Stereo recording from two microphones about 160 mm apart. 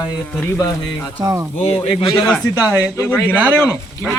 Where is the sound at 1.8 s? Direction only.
30° left (ahead or behind).